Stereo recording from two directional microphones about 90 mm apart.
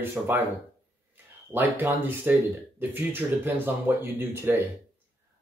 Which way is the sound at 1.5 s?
20° right (ahead or behind).